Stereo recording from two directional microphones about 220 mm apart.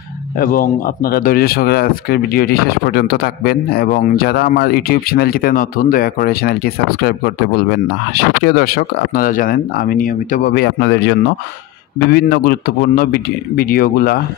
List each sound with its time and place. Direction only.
0.4 s speech: 40° left (ahead or behind)